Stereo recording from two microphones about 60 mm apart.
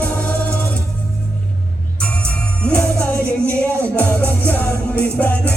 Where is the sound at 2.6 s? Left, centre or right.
Left.